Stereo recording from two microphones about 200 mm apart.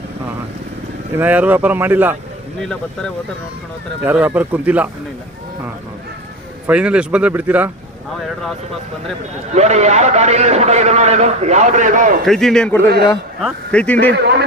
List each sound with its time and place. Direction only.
1.1 s speech: 10° right (ahead or behind)
2.6 s a man's voice: 5° left (ahead or behind)
4.0 s speech: 10° right (ahead or behind)
6.7 s speech: 5° right (ahead or behind)
9.6 s a man's voice: 35° right (ahead or behind)
12.2 s a man's voice: centre (ahead or behind)
12.8 s a man's voice: 55° right (ahead or behind)
13.4 s a man's voice: 5° left (ahead or behind)
14.1 s a man's voice: 55° right (ahead or behind)